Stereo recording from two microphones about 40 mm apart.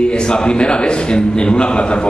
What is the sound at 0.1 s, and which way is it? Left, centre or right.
A man's voice, left.